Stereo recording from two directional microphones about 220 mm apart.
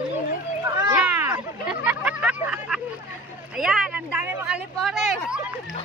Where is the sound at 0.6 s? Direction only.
15° right (ahead or behind).